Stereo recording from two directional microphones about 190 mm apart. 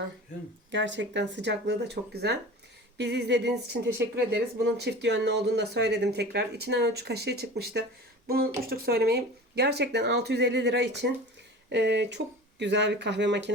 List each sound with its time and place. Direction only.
0.7 s speech: 70° right (ahead or behind)